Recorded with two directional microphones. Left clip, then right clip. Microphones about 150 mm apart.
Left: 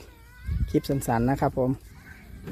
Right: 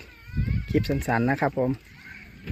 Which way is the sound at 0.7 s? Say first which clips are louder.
Even; 10° left (ahead or behind).